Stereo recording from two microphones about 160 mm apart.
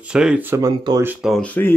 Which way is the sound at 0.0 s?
5° right (ahead or behind).